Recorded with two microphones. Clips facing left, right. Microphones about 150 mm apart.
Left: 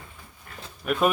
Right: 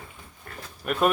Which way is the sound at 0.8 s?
Centre (ahead or behind).